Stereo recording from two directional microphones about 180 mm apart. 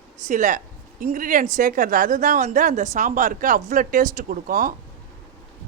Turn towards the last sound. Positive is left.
turn(degrees=-45)  # may be behind; listen again after turning